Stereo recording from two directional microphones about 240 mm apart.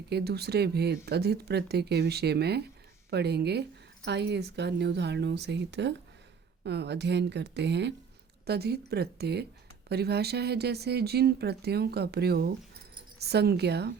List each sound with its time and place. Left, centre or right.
0.1 s speech: right